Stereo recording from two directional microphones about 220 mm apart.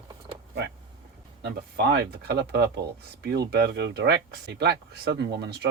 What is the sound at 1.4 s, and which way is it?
Speech, 50° right (ahead or behind).